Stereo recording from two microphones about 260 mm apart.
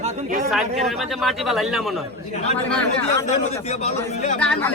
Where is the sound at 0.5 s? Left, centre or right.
Centre.